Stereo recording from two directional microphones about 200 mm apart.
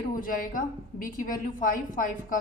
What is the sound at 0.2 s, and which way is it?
A woman's voice, 45° left (ahead or behind).